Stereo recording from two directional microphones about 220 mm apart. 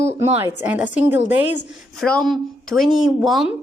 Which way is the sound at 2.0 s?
5° left (ahead or behind).